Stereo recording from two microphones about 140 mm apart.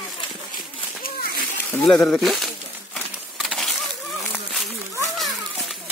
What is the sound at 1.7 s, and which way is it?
Speech, 5° left (ahead or behind).